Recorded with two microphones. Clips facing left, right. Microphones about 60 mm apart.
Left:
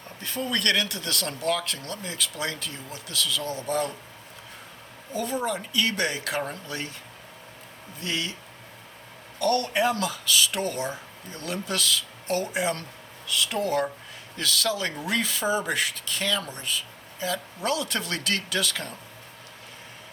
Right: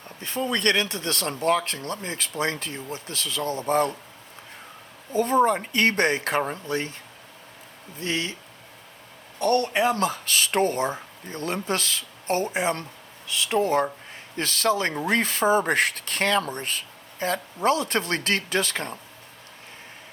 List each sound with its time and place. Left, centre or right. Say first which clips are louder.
0.2 s speech: right 3 dB; right
5.1 s speech: right 8 dB; right
8.0 s speech: right 3 dB; right
9.4 s speech: right 2 dB; right